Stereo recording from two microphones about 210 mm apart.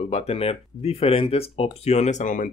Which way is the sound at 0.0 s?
30° left (ahead or behind).